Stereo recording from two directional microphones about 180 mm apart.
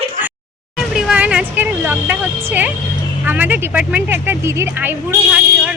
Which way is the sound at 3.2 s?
10° right (ahead or behind).